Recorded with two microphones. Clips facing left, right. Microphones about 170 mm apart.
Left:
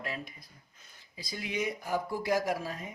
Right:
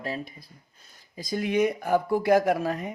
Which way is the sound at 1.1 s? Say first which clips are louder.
Right 11 dB; 45° right (ahead or behind).